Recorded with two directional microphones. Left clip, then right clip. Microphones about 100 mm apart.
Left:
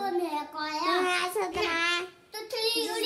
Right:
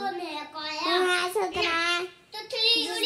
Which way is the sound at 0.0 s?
40° left (ahead or behind).